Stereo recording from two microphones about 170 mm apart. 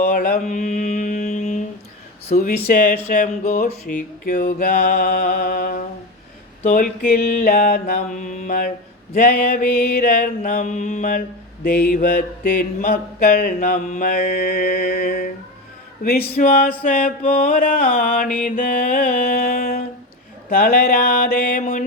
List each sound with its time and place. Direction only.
0.0 s mantra: 55° left (ahead or behind)
2.3 s speech: 50° left (ahead or behind)
2.6 s speech: 60° left (ahead or behind); by 3.8 s 45° left (ahead or behind)
3.9 s mantra: 50° left (ahead or behind)
7.9 s speech: 50° left (ahead or behind)
9.1 s mantra: 60° left (ahead or behind)
16.3 s mantra: 55° left (ahead or behind)